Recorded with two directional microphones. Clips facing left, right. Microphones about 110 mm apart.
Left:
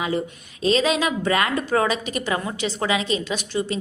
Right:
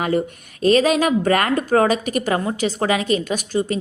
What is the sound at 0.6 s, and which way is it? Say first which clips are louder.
A woman's voice: right 5 dB; 50° right (ahead or behind).